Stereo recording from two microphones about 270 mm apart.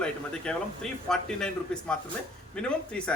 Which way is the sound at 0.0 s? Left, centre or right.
Centre.